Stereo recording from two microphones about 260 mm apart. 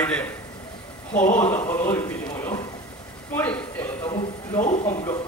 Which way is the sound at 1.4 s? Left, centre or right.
Centre.